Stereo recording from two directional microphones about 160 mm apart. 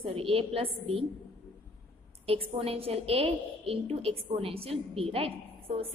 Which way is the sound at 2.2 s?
35° right (ahead or behind).